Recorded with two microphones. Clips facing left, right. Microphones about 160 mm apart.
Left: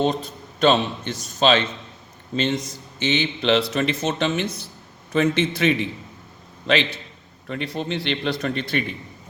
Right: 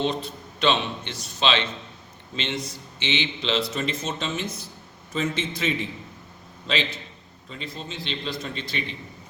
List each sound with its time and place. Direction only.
0.0 s a man's voice: 45° left (ahead or behind)
3.8 s a man's voice: 70° left (ahead or behind)